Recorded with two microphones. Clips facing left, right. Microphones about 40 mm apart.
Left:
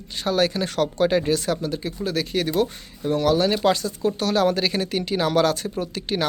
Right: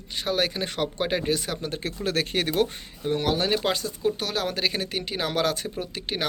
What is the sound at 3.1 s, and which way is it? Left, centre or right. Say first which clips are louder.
Speech: left 5 dB; right.